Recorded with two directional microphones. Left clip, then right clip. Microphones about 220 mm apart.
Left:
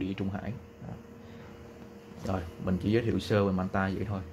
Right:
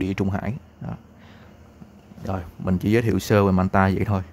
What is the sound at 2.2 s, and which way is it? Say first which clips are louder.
Speech: right 5 dB; 15° right (ahead or behind).